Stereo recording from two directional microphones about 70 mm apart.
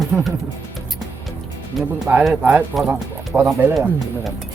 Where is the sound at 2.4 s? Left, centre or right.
Right.